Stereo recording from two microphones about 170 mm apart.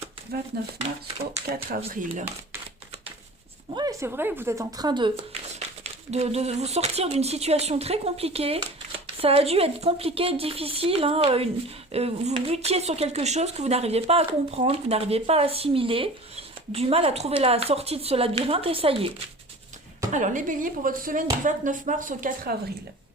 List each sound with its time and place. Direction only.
1.7 s speech: 50° right (ahead or behind)
3.8 s speech: 20° right (ahead or behind)
5.5 s speech: 40° right (ahead or behind)
20.1 s speech: 50° right (ahead or behind)